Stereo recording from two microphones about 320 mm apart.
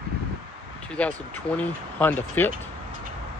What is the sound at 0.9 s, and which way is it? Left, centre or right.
Speech, centre.